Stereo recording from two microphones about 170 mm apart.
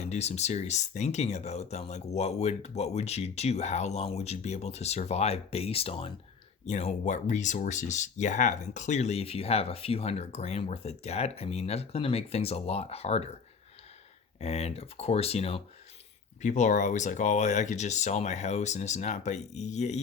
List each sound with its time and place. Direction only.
0.0 s speech: 40° left (ahead or behind)
14.3 s speech: 40° left (ahead or behind)
16.4 s speech: 45° left (ahead or behind)